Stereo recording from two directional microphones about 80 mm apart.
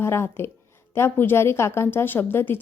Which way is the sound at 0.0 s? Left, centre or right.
Left.